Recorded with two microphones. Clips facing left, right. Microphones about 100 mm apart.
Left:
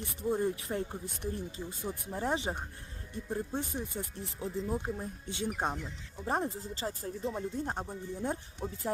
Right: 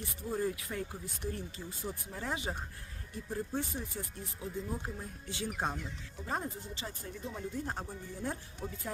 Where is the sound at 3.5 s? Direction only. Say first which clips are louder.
Left 1 dB; 20° left (ahead or behind).